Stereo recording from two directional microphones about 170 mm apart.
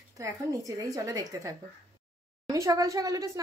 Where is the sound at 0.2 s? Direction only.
20° right (ahead or behind).